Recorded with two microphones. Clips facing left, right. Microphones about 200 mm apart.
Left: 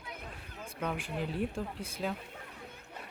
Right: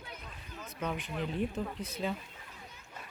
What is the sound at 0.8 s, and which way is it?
Speech, 5° left (ahead or behind).